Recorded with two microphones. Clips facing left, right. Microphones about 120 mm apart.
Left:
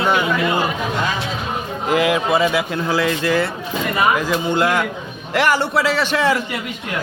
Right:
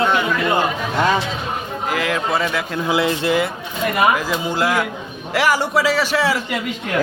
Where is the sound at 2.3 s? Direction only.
5° left (ahead or behind).